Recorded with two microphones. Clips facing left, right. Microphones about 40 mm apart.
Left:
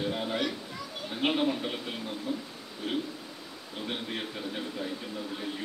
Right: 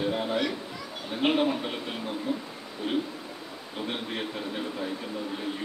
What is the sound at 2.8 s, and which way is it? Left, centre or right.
Speech, centre.